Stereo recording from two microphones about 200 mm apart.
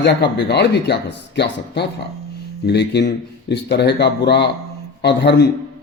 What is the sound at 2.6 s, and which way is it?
Speech, 60° left (ahead or behind).